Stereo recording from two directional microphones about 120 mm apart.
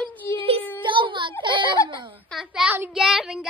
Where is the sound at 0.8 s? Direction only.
45° right (ahead or behind).